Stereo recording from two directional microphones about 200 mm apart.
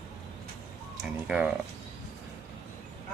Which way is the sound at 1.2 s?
5° right (ahead or behind).